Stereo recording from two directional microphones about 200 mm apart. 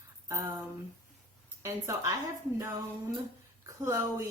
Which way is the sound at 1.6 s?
15° right (ahead or behind).